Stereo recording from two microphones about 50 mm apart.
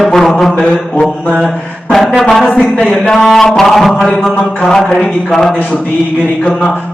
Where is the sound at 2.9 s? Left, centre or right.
Centre.